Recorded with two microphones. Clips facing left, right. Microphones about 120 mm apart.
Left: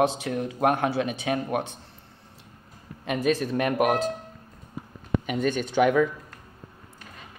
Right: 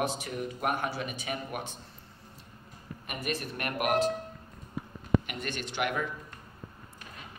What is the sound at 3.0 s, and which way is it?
Speech, 90° left.